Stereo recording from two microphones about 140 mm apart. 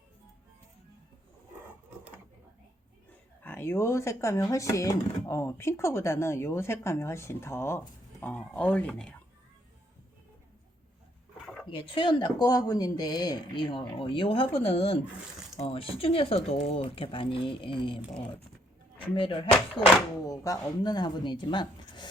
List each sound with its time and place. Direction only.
3.4 s speech: 15° left (ahead or behind)
11.6 s speech: 35° left (ahead or behind)
20.2 s speech: 25° left (ahead or behind)